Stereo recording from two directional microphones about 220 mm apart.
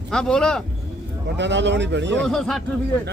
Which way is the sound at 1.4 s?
55° right (ahead or behind).